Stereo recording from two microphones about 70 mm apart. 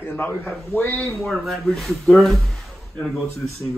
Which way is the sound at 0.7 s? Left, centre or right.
Left.